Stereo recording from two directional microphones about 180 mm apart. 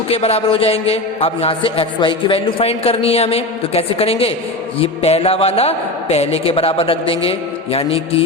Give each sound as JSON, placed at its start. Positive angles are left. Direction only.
{"t": 0.1, "sound": "a man's voice", "side_deg": 35}